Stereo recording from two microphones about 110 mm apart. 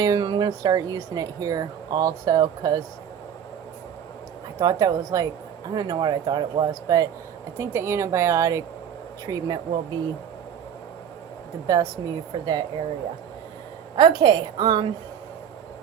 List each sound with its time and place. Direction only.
0.0 s speech: 40° right (ahead or behind)
4.6 s a woman's voice: 35° right (ahead or behind)
11.6 s speech: 35° right (ahead or behind)
13.9 s a woman's voice: 40° right (ahead or behind)